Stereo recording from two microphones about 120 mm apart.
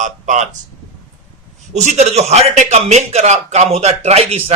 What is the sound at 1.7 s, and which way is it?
A man's voice, 75° right (ahead or behind).